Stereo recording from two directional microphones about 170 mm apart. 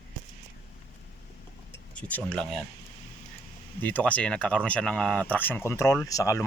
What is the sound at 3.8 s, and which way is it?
Speech, 10° left (ahead or behind).